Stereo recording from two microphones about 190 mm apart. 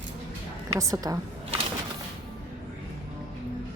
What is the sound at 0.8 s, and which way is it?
Speech, 20° right (ahead or behind).